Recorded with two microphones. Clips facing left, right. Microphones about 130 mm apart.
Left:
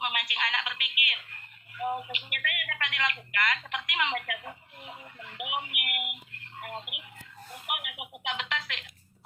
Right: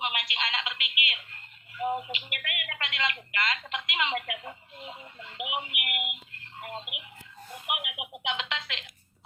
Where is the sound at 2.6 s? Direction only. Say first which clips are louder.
Right 1 dB; 25° right (ahead or behind).